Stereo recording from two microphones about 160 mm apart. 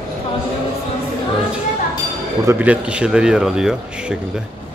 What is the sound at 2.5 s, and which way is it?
Speech, 10° right (ahead or behind).